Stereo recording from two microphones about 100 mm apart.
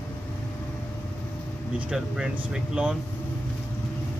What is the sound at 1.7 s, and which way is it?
Speech, 5° right (ahead or behind).